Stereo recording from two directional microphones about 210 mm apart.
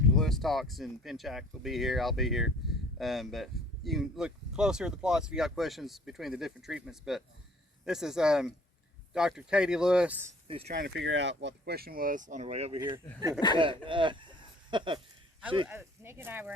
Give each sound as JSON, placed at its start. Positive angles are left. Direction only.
{"t": 0.2, "sound": "speech", "side_deg": 0}
{"t": 10.7, "sound": "speech", "side_deg": -50}
{"t": 15.6, "sound": "speech", "side_deg": -10}